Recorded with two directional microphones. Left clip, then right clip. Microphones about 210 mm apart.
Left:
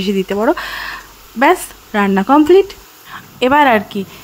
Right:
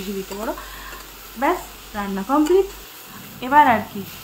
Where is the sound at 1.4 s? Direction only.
55° left (ahead or behind).